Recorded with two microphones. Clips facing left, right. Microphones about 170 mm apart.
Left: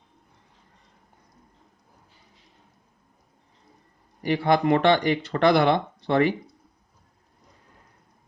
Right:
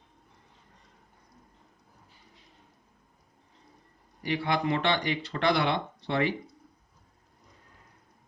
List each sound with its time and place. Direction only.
4.2 s speech: 50° left (ahead or behind)